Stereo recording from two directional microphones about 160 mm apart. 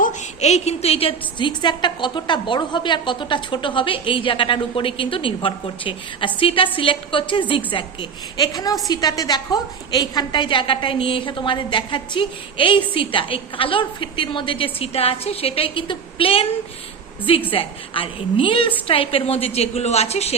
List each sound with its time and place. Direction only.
0.0 s a woman's voice: 50° left (ahead or behind)
17.5 s a woman's voice: 35° left (ahead or behind)